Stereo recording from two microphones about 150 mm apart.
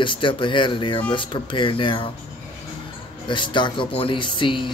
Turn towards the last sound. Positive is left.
turn(degrees=35)  # may be behind; listen again after turning